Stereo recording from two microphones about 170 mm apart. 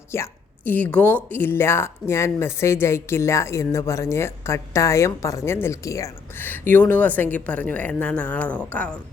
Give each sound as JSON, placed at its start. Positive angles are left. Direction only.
{"t": 0.1, "sound": "a woman's voice", "side_deg": 15}